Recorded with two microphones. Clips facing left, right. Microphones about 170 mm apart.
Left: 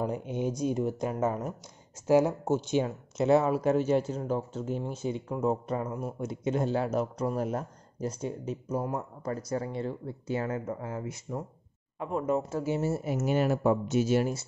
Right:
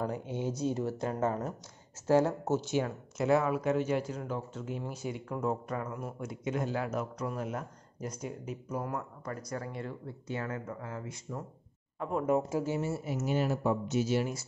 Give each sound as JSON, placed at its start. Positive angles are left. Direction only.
{"t": 0.0, "sound": "speech", "side_deg": 20}
{"t": 12.0, "sound": "speech", "side_deg": 0}
{"t": 13.0, "sound": "speech", "side_deg": 60}